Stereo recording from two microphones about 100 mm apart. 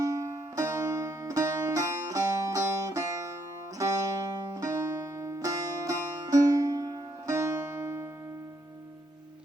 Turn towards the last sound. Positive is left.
turn(degrees=-25)  # may be behind; listen again after turning